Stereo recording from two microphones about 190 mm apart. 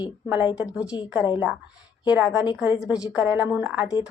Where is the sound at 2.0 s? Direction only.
10° right (ahead or behind).